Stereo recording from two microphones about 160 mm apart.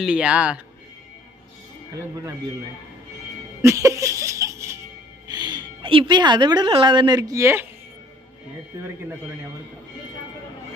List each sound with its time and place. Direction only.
0.0 s speech: 5° right (ahead or behind)
3.6 s music: 20° right (ahead or behind)
5.3 s speech: 25° right (ahead or behind)
8.7 s speech: 15° right (ahead or behind)